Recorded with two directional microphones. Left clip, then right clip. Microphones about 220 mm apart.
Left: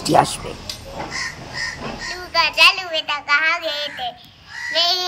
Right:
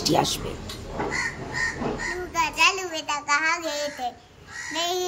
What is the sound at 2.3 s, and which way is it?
Child singing, 15° right (ahead or behind).